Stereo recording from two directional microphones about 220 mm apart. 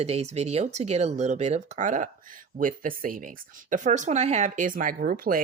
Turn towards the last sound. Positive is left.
turn(degrees=-40)  # may be behind; listen again after turning